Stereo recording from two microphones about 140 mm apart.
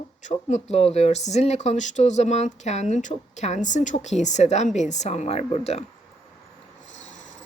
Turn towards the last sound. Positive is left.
turn(degrees=50)  # may be behind; listen again after turning